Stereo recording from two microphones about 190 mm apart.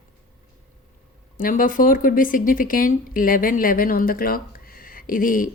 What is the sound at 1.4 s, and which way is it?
Speech, 45° left (ahead or behind).